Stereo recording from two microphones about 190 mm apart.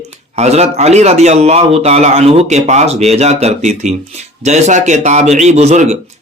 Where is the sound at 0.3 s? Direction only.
35° right (ahead or behind).